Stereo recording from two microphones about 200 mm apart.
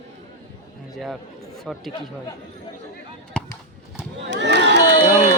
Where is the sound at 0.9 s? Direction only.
Centre (ahead or behind).